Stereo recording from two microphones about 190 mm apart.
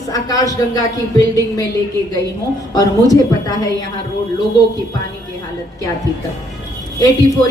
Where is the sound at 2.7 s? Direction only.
20° left (ahead or behind).